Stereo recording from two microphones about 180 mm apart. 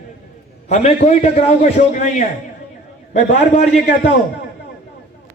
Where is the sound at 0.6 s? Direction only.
35° left (ahead or behind).